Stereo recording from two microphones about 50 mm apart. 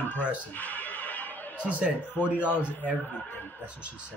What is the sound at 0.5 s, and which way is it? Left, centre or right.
Chuckle, left.